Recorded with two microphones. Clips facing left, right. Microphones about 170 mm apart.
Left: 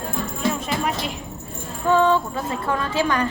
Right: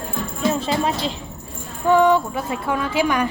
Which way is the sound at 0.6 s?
30° right (ahead or behind).